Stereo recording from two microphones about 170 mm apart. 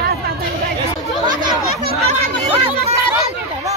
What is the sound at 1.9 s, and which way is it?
Speech, 35° right (ahead or behind).